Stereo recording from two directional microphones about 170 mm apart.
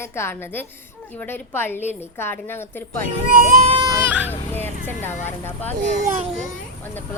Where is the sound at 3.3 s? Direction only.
55° right (ahead or behind).